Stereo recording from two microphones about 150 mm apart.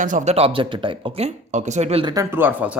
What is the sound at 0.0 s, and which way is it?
Speech, 60° right (ahead or behind).